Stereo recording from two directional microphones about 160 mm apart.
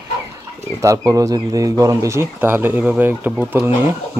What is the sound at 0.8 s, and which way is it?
Speech, 20° right (ahead or behind).